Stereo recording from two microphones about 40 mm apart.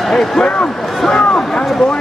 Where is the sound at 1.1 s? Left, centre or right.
Left.